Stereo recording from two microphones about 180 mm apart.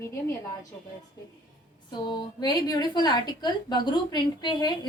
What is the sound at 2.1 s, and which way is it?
A woman's voice, 25° left (ahead or behind).